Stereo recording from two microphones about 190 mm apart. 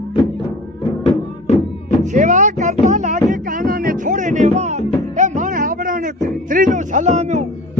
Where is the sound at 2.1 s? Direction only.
40° right (ahead or behind).